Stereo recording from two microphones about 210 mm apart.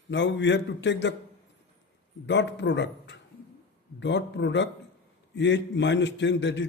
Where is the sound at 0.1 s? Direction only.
60° left (ahead or behind).